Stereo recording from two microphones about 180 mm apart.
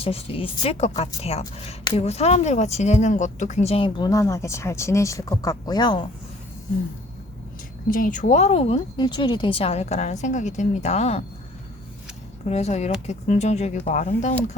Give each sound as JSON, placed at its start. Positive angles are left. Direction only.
{"t": 0.0, "sound": "speech", "side_deg": 30}
{"t": 7.9, "sound": "speech", "side_deg": 50}
{"t": 12.5, "sound": "speech", "side_deg": 35}